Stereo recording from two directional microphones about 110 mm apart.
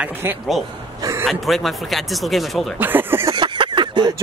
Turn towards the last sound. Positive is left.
turn(degrees=-45)  # may be behind; listen again after turning